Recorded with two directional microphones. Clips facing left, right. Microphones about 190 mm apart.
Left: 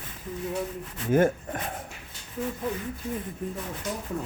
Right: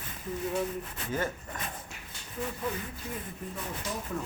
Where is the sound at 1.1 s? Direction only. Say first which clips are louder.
Left 11 dB; 55° left (ahead or behind).